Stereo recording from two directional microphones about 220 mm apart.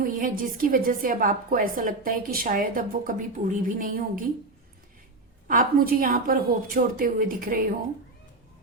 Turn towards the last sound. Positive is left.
turn(degrees=-40)  # may be behind; listen again after turning